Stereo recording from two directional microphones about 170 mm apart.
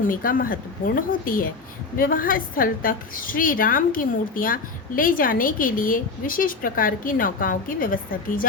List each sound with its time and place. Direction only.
0.1 s a woman's voice: 55° left (ahead or behind)